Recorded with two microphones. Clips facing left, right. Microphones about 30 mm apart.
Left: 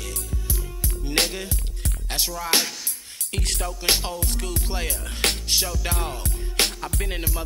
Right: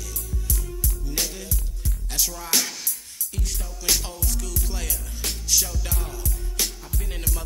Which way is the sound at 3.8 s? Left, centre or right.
Left.